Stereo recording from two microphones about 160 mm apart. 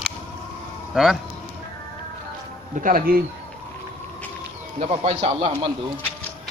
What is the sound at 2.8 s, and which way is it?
Speech, 60° right (ahead or behind).